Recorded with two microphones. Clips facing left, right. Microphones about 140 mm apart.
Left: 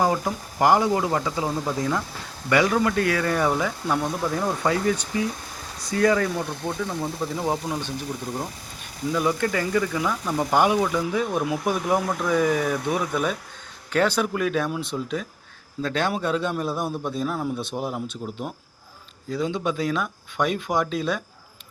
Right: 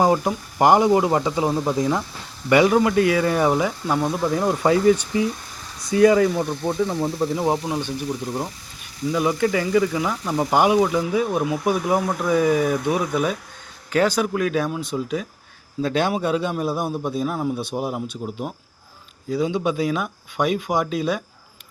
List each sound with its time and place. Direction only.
0.0 s speech: 20° right (ahead or behind)
4.6 s speech: 20° right (ahead or behind)
9.1 s speech: 10° right (ahead or behind)